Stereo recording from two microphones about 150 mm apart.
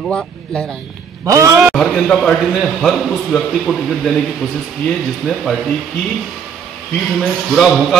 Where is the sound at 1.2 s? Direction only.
20° right (ahead or behind).